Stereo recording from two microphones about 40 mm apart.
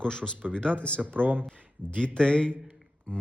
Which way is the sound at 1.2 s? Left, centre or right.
Right.